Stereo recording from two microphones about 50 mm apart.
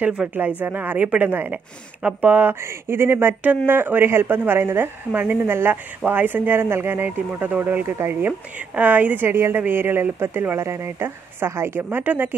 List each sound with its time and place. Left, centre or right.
0.3 s a woman's voice: right
2.6 s a woman's voice: right
8.5 s a woman's voice: right
12.0 s a woman's voice: right